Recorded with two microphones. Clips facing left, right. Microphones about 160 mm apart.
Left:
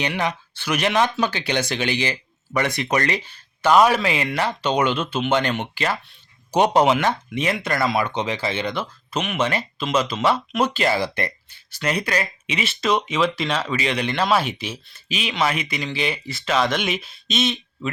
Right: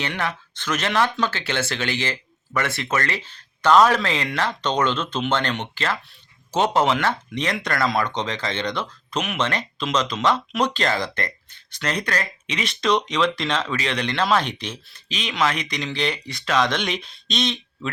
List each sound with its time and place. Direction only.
0.0 s speech: 15° left (ahead or behind)